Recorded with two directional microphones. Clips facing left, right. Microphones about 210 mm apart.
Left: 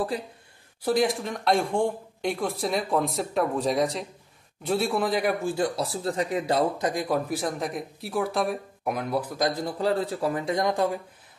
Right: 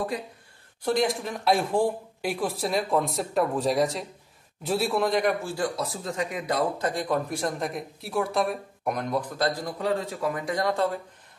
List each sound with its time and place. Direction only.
0.8 s speech: centre (ahead or behind)
5.8 s speech: 35° left (ahead or behind)
6.8 s speech: 10° left (ahead or behind)
9.6 s a man's voice: 30° left (ahead or behind)